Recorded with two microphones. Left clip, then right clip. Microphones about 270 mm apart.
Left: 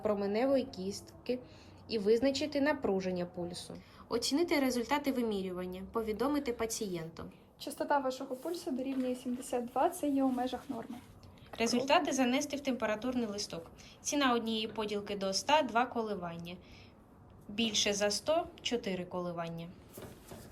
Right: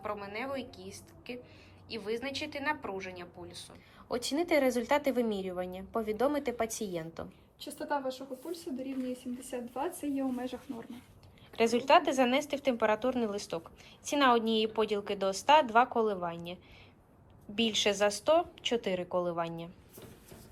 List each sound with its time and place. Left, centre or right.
0.0 s a woman's voice: centre
1.9 s a woman's voice: centre
7.6 s a woman's voice: centre
7.9 s speech: centre
9.0 s a woman's voice: centre
10.7 s speech: centre